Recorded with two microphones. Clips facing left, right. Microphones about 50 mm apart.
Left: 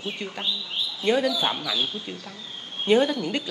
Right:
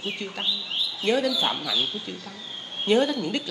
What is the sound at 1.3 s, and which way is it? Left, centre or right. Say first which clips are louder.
Speech: even; centre.